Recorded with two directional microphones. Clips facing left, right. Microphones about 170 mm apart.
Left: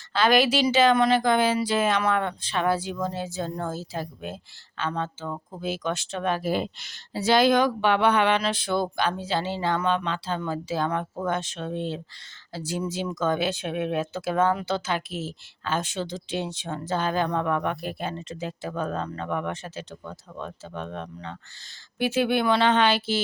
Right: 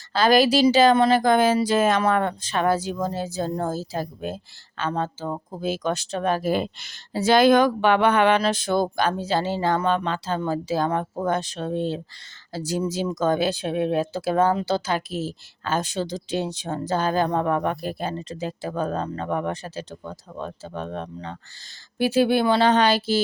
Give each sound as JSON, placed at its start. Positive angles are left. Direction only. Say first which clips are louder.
{"t": 0.1, "sound": "speech", "louder": "right 3 dB", "side_deg": -40}